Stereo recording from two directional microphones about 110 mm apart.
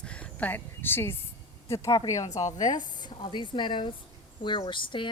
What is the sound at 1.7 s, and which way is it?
A woman's voice, 30° left (ahead or behind).